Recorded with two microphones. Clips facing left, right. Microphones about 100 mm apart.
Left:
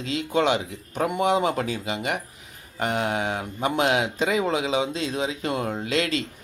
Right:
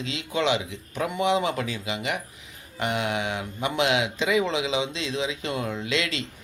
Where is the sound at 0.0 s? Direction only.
45° left (ahead or behind).